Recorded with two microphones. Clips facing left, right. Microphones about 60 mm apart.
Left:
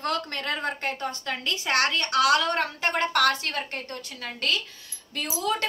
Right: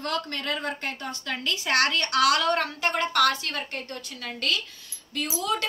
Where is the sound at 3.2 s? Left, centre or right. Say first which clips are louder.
Right 2 dB; left.